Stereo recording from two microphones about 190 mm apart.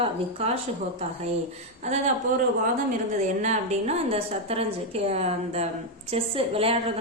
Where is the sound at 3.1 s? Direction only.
40° right (ahead or behind).